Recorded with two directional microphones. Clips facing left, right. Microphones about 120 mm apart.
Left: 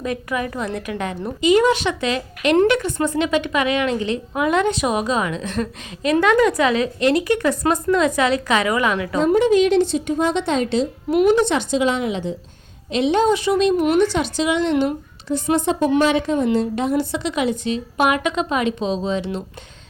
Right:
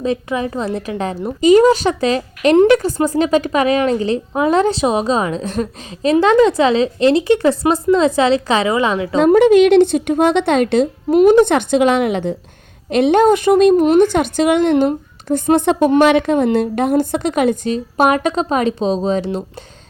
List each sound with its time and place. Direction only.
0.0 s a woman's voice: 25° right (ahead or behind)
9.2 s speech: 65° right (ahead or behind)
11.1 s a woman's voice: 35° right (ahead or behind)
11.3 s speech: 55° right (ahead or behind)